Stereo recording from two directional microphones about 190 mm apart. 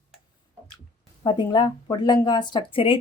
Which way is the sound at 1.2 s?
25° left (ahead or behind).